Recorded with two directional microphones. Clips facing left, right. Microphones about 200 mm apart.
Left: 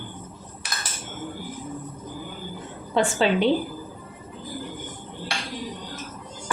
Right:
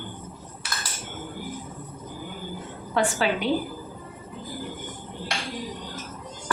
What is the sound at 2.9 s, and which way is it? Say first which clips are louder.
Speech: left 3 dB; 25° left (ahead or behind).